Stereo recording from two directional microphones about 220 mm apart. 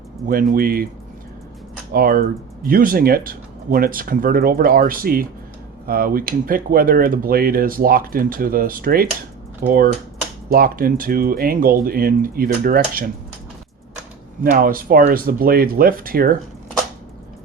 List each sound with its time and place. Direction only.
0.3 s speech: 40° right (ahead or behind)
1.9 s speech: 40° right (ahead or behind)
14.5 s speech: 40° right (ahead or behind)